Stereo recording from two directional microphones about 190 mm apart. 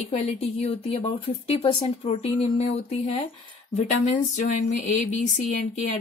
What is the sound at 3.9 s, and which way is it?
Speech, 45° left (ahead or behind).